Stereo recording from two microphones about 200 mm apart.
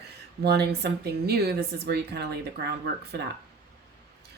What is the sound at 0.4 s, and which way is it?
Speech, 55° right (ahead or behind).